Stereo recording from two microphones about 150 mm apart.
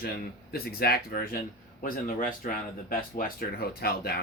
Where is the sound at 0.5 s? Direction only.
90° left.